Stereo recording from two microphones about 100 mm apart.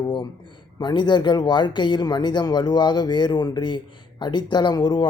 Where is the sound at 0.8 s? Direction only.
50° left (ahead or behind).